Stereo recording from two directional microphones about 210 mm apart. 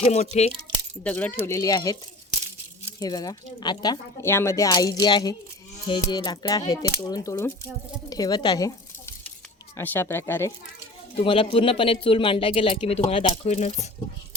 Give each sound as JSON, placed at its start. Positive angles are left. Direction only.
{"t": 0.0, "sound": "speech", "side_deg": 30}
{"t": 1.0, "sound": "speech", "side_deg": 5}
{"t": 3.0, "sound": "speech", "side_deg": 20}
{"t": 11.2, "sound": "speech", "side_deg": 25}